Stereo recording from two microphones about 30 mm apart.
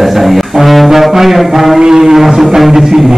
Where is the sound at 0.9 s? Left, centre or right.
Centre.